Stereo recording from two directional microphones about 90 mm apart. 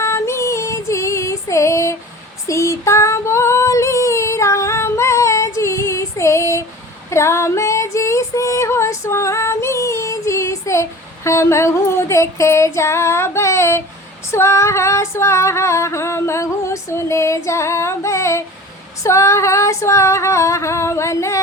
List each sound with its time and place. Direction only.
0.0 s female singing: 30° left (ahead or behind)